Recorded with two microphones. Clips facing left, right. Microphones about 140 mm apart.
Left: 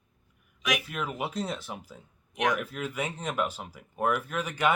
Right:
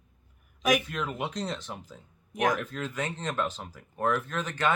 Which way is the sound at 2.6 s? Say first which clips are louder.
Even; 10° left (ahead or behind).